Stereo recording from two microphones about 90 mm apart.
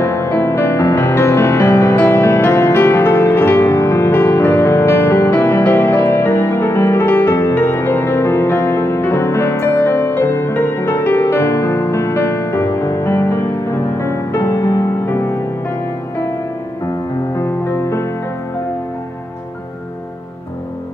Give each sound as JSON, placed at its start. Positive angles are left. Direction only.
{"t": 0.0, "sound": "music", "side_deg": 30}
{"t": 17.4, "sound": "music", "side_deg": 30}